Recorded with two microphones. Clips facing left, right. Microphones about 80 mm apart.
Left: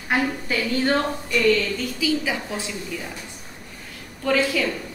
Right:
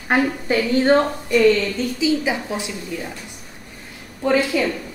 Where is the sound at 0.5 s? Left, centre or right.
Right.